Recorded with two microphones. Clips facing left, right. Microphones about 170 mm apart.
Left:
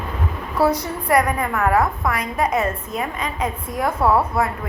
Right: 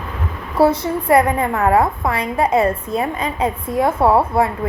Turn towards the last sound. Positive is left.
turn(degrees=-25)  # may be behind; listen again after turning